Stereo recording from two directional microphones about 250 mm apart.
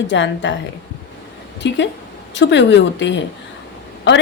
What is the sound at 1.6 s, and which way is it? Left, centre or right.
A woman's voice, left.